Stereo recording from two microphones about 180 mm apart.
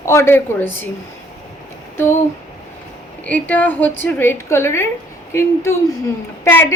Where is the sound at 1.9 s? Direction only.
15° left (ahead or behind).